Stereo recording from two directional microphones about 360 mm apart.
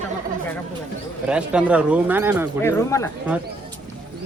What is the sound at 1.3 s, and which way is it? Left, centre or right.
Speech, centre.